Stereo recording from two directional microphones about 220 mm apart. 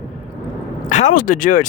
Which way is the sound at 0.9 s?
35° left (ahead or behind).